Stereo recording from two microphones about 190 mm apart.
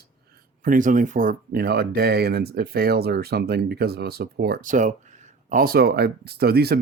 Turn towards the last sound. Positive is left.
turn(degrees=-55)  # may be behind; listen again after turning